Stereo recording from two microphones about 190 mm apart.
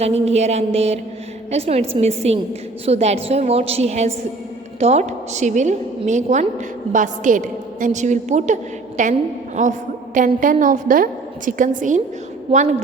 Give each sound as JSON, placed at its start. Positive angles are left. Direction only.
{"t": 0.0, "sound": "a woman's voice", "side_deg": -35}
{"t": 12.5, "sound": "a woman's voice", "side_deg": -30}